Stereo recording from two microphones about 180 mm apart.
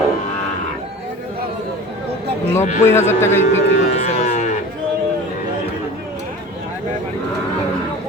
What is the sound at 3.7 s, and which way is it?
Cattle, 40° left (ahead or behind).